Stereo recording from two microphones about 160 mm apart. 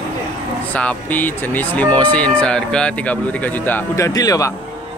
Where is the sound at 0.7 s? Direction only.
10° left (ahead or behind).